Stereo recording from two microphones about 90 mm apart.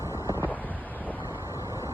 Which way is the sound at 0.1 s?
25° right (ahead or behind).